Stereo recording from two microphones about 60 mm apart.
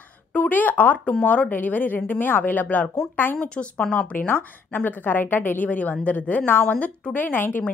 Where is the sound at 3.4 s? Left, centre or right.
Centre.